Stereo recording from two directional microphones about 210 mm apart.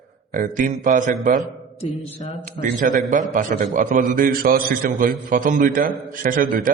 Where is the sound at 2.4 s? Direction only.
40° right (ahead or behind).